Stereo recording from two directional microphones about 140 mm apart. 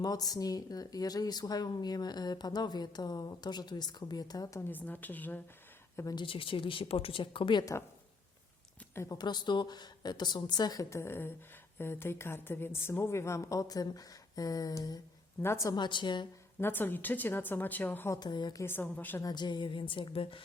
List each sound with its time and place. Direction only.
0.0 s speech: 25° left (ahead or behind)
4.7 s a woman's voice: 10° left (ahead or behind)
6.0 s speech: 25° left (ahead or behind)
6.2 s speech: 40° left (ahead or behind)
7.6 s speech: 25° left (ahead or behind)
9.0 s speech: 30° left (ahead or behind)
16.6 s a woman's voice: 15° left (ahead or behind)
18.2 s speech: 30° left (ahead or behind)
18.6 s a woman's voice: 15° left (ahead or behind)
19.2 s speech: 30° left (ahead or behind)